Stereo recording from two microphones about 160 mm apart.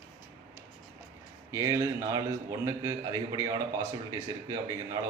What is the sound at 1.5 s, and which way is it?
A man's voice, 20° right (ahead or behind).